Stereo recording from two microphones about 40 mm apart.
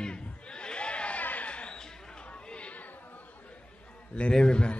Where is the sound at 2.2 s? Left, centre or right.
Left.